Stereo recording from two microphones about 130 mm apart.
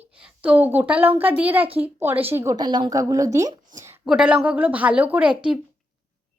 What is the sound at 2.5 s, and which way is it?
Speech, 35° right (ahead or behind).